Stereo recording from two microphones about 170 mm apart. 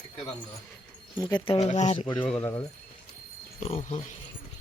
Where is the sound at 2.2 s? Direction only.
5° left (ahead or behind).